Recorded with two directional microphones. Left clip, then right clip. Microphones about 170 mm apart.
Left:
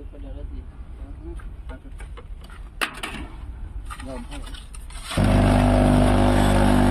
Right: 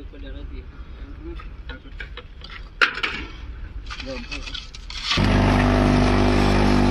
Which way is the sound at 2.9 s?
45° left (ahead or behind).